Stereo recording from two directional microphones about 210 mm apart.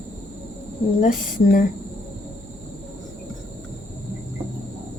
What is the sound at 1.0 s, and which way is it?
Speech, 40° left (ahead or behind).